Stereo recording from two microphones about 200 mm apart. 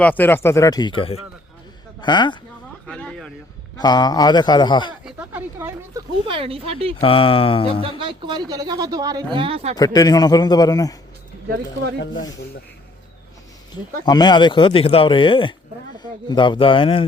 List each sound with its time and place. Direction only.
0.0 s speech: 10° left (ahead or behind)
2.8 s a sound: 5° left (ahead or behind)
3.8 s speech: 20° left (ahead or behind)
5.0 s a sound: 10° right (ahead or behind)
6.2 s speech: 25° right (ahead or behind)
7.0 s speech: 25° left (ahead or behind)
7.9 s speech: 25° right (ahead or behind)
9.7 s speech: 20° left (ahead or behind)
11.4 s speech: 55° right (ahead or behind)
14.0 s speech: 20° left (ahead or behind)